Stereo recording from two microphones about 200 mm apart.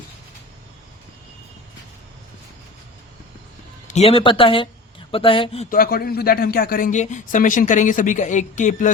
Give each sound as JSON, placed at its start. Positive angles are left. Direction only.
{"t": 3.8, "sound": "speech", "side_deg": 35}
{"t": 5.7, "sound": "speech", "side_deg": 50}